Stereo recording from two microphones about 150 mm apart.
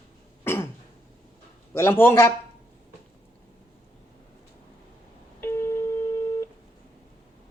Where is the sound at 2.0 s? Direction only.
15° left (ahead or behind).